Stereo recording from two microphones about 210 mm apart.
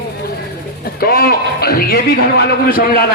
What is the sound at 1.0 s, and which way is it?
A man's voice, 45° left (ahead or behind).